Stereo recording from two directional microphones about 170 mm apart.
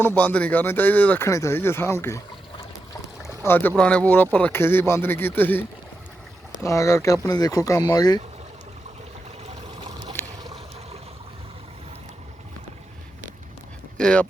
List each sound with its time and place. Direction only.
0.0 s speech: 10° left (ahead or behind)
3.2 s speech: 15° left (ahead or behind)
10.2 s boat: 15° left (ahead or behind)
14.0 s speech: 5° left (ahead or behind)